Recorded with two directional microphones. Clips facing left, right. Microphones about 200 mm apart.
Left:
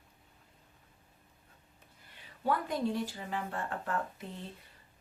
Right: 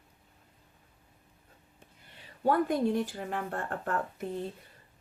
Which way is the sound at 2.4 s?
50° right (ahead or behind).